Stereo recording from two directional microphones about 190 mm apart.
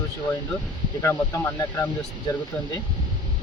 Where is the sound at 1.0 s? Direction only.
15° left (ahead or behind).